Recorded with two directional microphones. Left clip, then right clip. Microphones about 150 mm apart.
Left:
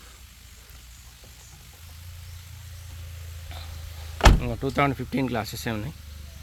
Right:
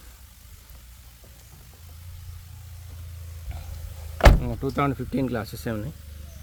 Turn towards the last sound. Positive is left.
turn(degrees=0)  # may be behind; listen again after turning